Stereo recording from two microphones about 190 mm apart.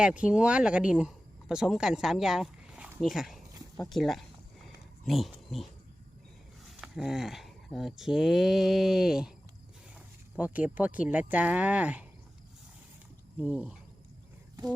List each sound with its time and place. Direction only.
0.0 s speech: 5° right (ahead or behind)
3.8 s a sound: centre (ahead or behind)
6.8 s speech: centre (ahead or behind)
10.3 s speech: 10° right (ahead or behind)
13.4 s speech: 5° right (ahead or behind)